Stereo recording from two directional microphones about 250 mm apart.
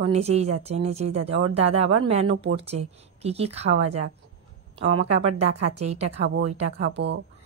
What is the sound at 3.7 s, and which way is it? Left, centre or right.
Speech, right.